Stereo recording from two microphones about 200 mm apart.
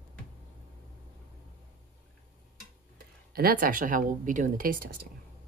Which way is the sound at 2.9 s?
50° right (ahead or behind).